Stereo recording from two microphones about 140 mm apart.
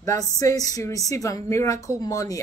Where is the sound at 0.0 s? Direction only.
25° left (ahead or behind).